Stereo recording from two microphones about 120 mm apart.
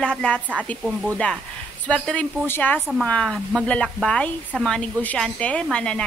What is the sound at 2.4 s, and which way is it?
Speech, 15° left (ahead or behind).